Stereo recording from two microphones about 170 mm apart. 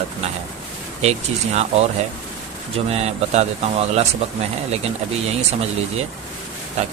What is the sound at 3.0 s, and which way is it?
Speech, 40° right (ahead or behind).